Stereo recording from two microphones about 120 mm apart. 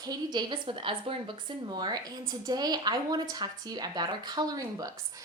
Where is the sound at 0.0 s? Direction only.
35° right (ahead or behind).